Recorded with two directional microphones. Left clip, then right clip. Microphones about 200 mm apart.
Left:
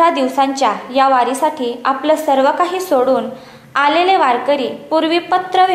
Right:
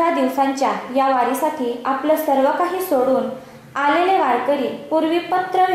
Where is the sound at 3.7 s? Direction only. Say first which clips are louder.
Left 4 dB; 5° left (ahead or behind).